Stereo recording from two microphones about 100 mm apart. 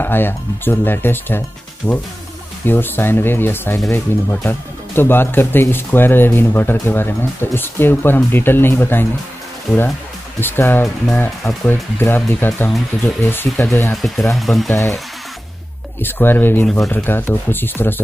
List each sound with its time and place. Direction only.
0.0 s speech: 20° left (ahead or behind)
9.7 s speech: 5° right (ahead or behind)
10.4 s speech: 20° left (ahead or behind)
14.3 s speech: centre (ahead or behind)
16.0 s speech: 20° left (ahead or behind)